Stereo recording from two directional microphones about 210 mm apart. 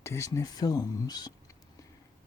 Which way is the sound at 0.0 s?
15° left (ahead or behind).